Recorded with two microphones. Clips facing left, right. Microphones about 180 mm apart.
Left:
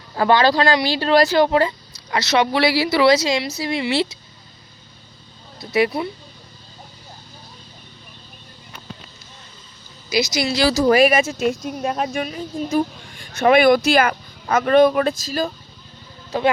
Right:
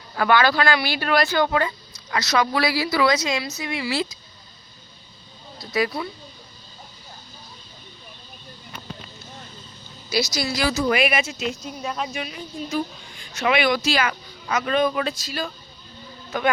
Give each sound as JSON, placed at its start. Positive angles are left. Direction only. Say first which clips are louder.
{"t": 0.2, "sound": "speech", "louder": "left 3 dB", "side_deg": 30}
{"t": 5.5, "sound": "speech", "louder": "left 5 dB", "side_deg": 25}
{"t": 10.1, "sound": "a man's voice", "louder": "left 4 dB", "side_deg": 20}